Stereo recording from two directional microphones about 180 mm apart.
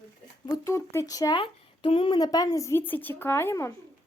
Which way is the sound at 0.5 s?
15° left (ahead or behind).